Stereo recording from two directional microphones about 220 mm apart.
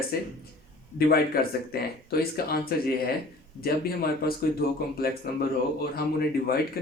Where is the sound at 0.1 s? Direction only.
45° left (ahead or behind).